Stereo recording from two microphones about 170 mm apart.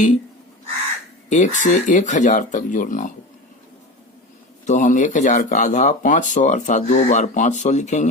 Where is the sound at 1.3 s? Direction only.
45° left (ahead or behind).